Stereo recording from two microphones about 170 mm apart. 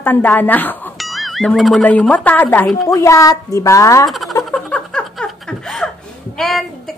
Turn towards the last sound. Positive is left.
turn(degrees=0)  # may be behind; listen again after turning